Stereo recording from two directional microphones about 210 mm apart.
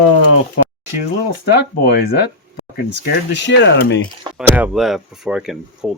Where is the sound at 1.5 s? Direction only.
50° left (ahead or behind).